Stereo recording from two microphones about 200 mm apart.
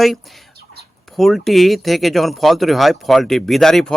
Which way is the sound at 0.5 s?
50° right (ahead or behind).